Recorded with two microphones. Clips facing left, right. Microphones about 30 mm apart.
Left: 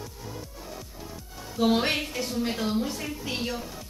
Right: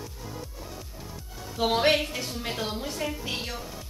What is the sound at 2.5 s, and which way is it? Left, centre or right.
Speech, centre.